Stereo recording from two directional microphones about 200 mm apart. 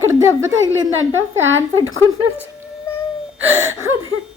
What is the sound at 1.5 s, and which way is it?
Speech, 85° right.